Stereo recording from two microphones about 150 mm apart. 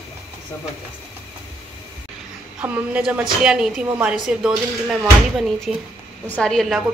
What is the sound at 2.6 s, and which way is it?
A woman's voice, 10° right (ahead or behind).